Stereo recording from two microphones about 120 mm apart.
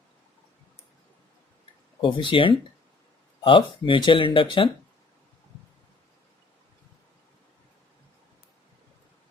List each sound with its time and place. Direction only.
2.0 s speech: 45° left (ahead or behind)